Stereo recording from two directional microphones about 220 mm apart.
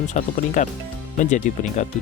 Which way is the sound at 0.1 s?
35° left (ahead or behind).